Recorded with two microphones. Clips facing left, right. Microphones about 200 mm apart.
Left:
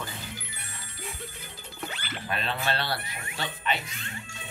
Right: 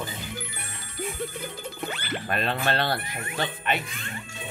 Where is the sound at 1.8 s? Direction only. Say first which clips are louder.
Right 4 dB; 55° right (ahead or behind).